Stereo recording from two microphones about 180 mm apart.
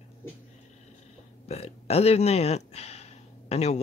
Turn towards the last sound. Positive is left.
turn(degrees=35)  # may be behind; listen again after turning